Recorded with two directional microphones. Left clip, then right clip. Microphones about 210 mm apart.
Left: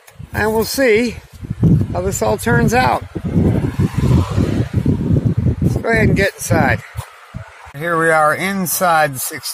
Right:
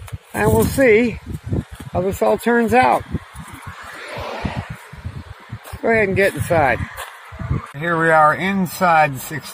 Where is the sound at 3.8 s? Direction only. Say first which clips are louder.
Left 8 dB; 60° left (ahead or behind).